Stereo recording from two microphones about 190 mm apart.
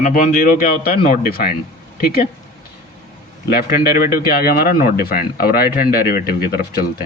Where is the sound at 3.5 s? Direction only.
50° left (ahead or behind).